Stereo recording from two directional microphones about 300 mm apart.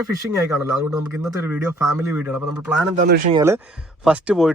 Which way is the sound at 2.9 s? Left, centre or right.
Right.